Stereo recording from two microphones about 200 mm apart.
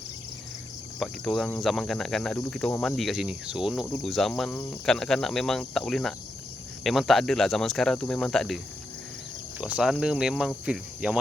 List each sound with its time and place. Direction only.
0.9 s speech: centre (ahead or behind)